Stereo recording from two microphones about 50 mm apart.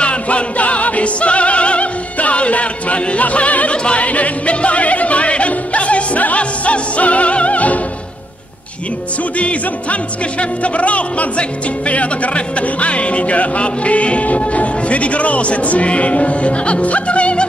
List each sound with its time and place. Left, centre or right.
0.0 s music: left
9.4 s music: left